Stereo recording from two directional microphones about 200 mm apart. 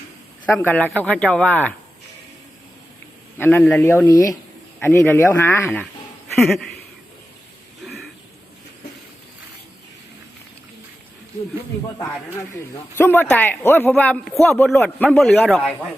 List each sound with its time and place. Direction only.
0.4 s a man's voice: 10° left (ahead or behind)
3.3 s a man's voice: 10° left (ahead or behind)
13.0 s a man's voice: 10° left (ahead or behind)